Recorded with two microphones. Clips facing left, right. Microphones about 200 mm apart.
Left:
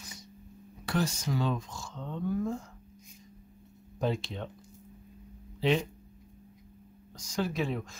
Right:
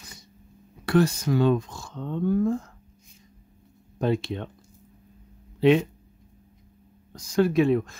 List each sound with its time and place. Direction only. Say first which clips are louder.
0.8 s speech: right 10 dB; 60° right (ahead or behind)
4.0 s speech: right 6 dB; 60° right (ahead or behind)
5.6 s speech: right 9 dB; 60° right (ahead or behind)
7.1 s speech: right 10 dB; 55° right (ahead or behind)